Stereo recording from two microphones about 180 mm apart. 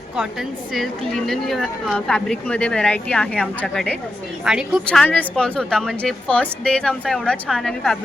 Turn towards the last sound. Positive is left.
turn(degrees=5)  # may be behind; listen again after turning